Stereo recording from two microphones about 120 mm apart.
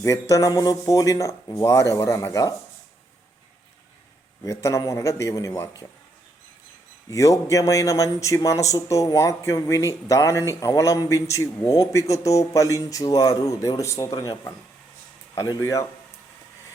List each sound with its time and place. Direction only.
0.0 s speech: 30° left (ahead or behind)
4.4 s speech: 25° left (ahead or behind)
7.1 s speech: 25° left (ahead or behind)